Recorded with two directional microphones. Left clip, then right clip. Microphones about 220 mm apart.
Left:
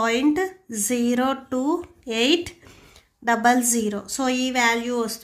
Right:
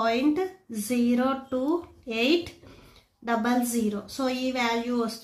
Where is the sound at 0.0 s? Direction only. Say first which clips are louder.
Left 4 dB; 40° left (ahead or behind).